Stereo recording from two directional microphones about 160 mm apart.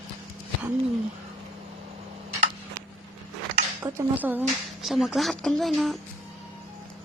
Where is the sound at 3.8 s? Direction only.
10° right (ahead or behind).